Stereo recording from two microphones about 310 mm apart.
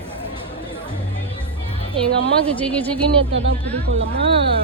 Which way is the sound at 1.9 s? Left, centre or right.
Centre.